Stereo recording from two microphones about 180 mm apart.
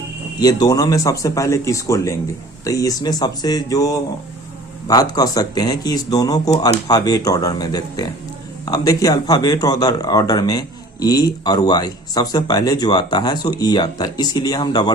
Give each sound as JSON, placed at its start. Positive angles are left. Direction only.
{"t": 0.3, "sound": "speech", "side_deg": 20}